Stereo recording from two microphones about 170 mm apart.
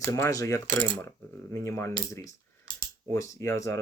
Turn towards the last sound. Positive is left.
turn(degrees=20)  # may be behind; listen again after turning